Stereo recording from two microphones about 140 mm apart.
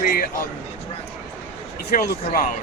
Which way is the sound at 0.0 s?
90° left.